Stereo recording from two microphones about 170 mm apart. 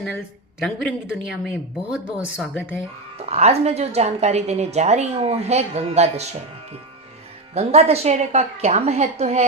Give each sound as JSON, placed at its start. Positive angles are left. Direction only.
{"t": 0.6, "sound": "speech", "side_deg": 0}
{"t": 3.2, "sound": "a woman's voice", "side_deg": -40}
{"t": 7.5, "sound": "a woman's voice", "side_deg": -40}